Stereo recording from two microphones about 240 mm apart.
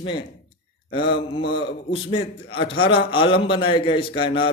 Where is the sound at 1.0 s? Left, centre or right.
Left.